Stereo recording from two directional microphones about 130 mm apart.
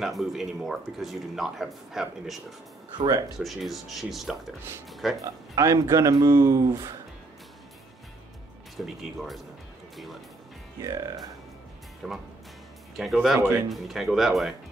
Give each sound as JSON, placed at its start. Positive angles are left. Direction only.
{"t": 0.0, "sound": "speech", "side_deg": 0}
{"t": 3.3, "sound": "speech", "side_deg": 0}
{"t": 5.2, "sound": "speech", "side_deg": -25}
{"t": 8.8, "sound": "speech", "side_deg": 0}
{"t": 10.8, "sound": "speech", "side_deg": -30}
{"t": 12.0, "sound": "speech", "side_deg": 0}